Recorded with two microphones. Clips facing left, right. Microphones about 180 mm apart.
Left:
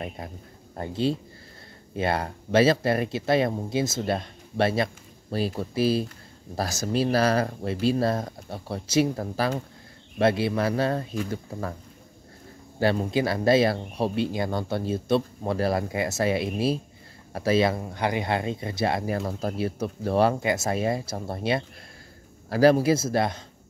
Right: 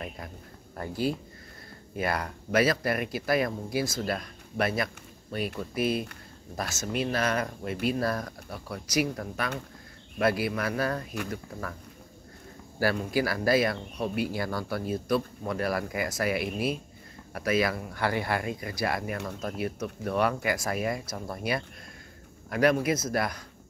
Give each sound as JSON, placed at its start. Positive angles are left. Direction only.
{"t": 0.7, "sound": "speech", "side_deg": 25}
{"t": 12.7, "sound": "speech", "side_deg": 25}